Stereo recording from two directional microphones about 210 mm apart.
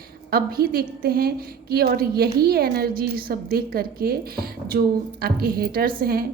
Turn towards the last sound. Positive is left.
turn(degrees=-45)  # may be behind; listen again after turning